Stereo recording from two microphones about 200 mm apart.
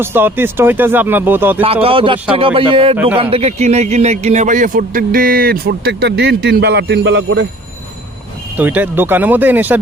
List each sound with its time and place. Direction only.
0.0 s speech: 10° right (ahead or behind)
1.6 s a man's voice: 30° right (ahead or behind); by 7.4 s 60° right (ahead or behind)
8.5 s speech: 10° right (ahead or behind)